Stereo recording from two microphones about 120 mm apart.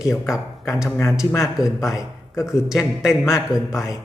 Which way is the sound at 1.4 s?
5° right (ahead or behind).